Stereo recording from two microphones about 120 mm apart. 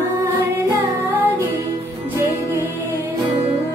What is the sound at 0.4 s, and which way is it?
Music, 15° right (ahead or behind).